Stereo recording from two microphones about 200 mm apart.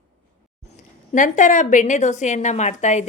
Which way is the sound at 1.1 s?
40° left (ahead or behind).